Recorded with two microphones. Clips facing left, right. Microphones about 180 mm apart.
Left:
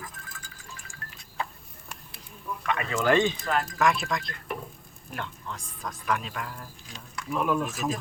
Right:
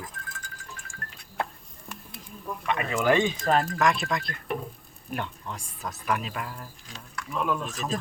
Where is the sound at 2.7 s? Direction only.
20° right (ahead or behind).